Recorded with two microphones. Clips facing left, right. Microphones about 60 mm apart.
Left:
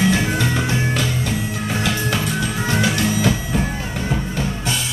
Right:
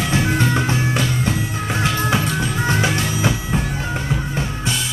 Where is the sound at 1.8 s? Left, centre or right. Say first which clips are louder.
Right 3 dB; centre.